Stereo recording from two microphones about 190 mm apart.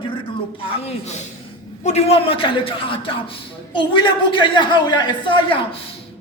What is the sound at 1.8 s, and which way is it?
A man's voice, 35° left (ahead or behind).